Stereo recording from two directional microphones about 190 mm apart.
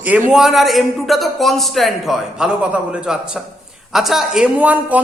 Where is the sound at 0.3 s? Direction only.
Centre (ahead or behind).